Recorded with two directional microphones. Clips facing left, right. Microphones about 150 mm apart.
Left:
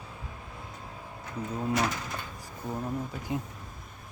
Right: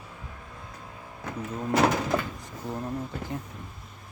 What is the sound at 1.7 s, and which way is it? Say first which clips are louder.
Speech: right 9 dB; 70° right (ahead or behind).